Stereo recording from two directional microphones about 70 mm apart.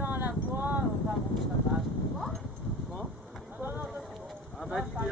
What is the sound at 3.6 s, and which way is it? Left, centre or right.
Run, right.